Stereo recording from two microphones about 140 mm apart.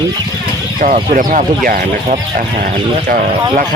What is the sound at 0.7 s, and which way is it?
Speech, 65° right (ahead or behind).